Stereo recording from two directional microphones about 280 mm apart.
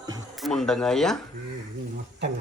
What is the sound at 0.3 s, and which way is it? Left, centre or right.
Speech, centre.